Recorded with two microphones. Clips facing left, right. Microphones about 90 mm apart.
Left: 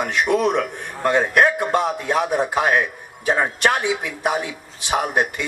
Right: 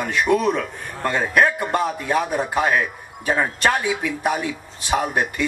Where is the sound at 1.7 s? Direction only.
70° left (ahead or behind).